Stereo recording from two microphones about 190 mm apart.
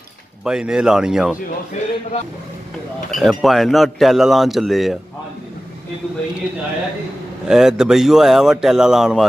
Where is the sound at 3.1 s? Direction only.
Centre (ahead or behind).